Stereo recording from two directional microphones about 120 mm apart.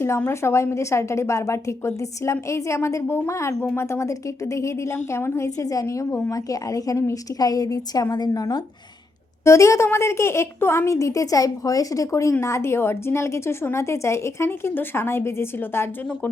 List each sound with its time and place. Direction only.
0.2 s a woman's voice: 20° left (ahead or behind)